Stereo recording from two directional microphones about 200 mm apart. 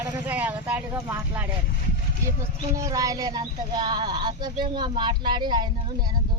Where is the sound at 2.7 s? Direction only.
15° right (ahead or behind).